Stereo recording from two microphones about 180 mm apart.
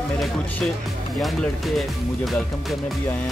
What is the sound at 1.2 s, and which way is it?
Speech, centre (ahead or behind).